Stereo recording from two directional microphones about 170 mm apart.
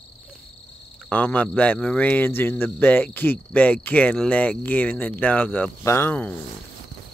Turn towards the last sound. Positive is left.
turn(degrees=10)  # may be behind; listen again after turning